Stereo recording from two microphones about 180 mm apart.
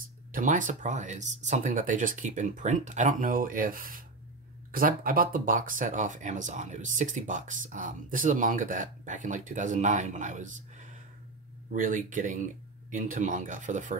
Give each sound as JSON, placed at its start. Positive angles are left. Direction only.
{"t": 0.0, "sound": "speech", "side_deg": -50}